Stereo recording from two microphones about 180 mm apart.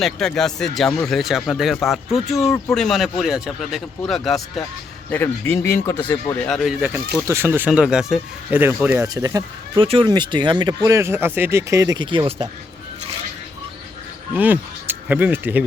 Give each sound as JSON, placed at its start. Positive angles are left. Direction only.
{"t": 0.0, "sound": "speech", "side_deg": 5}
{"t": 5.1, "sound": "speech", "side_deg": 10}
{"t": 9.8, "sound": "speech", "side_deg": -30}
{"t": 14.3, "sound": "speech", "side_deg": -10}